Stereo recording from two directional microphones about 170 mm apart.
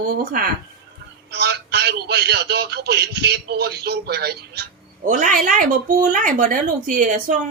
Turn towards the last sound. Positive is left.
turn(degrees=-50)  # may be behind; listen again after turning